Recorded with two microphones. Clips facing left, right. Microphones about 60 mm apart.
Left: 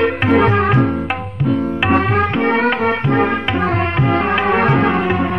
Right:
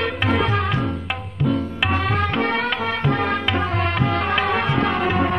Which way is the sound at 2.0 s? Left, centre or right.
Left.